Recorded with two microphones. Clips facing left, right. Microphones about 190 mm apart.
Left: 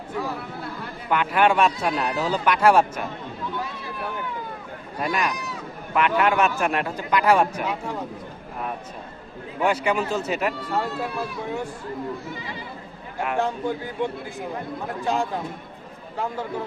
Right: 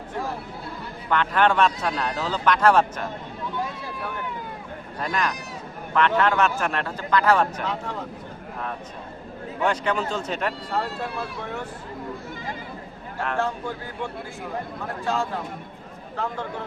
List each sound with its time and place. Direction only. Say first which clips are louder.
1.1 s a man's voice: left 1 dB; 10° left (ahead or behind)
4.9 s a man's voice: left 2 dB; 10° left (ahead or behind)
9.6 s a man's voice: left 2 dB; 10° left (ahead or behind)
13.1 s a man's voice: left 2 dB; 15° left (ahead or behind)